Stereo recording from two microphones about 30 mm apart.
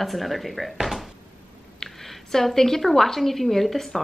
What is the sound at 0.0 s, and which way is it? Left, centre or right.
Speech, centre.